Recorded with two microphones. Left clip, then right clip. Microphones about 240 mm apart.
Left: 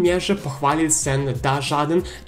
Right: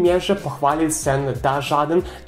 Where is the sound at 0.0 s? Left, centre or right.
Left.